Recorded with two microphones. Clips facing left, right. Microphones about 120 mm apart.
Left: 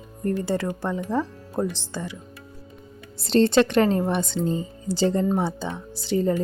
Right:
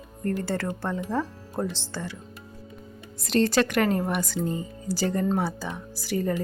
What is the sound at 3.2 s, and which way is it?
Speech, 30° left (ahead or behind).